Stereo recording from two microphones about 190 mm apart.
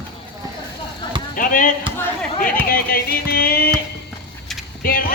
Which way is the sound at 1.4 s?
45° left (ahead or behind).